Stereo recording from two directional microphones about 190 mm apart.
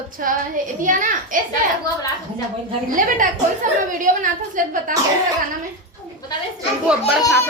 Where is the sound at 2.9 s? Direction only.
45° right (ahead or behind).